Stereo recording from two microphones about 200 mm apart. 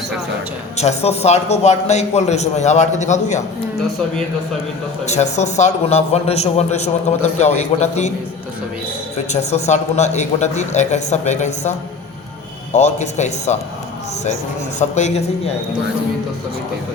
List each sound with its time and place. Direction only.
0.8 s a man's voice: 30° left (ahead or behind)
5.0 s a man's voice: 35° left (ahead or behind)
9.3 s a man's voice: 35° left (ahead or behind)
12.7 s a man's voice: 35° left (ahead or behind)
14.8 s a man's voice: 35° left (ahead or behind)